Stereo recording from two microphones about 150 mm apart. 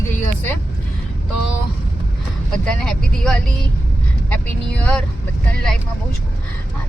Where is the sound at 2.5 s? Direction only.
5° left (ahead or behind).